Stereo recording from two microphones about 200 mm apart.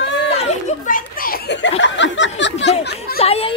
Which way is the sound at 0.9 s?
45° left (ahead or behind).